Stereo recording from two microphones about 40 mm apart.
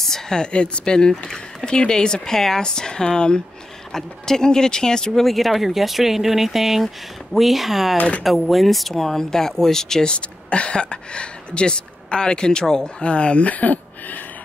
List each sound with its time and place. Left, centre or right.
0.0 s speech: centre
5.2 s speech: centre
10.1 s speech: left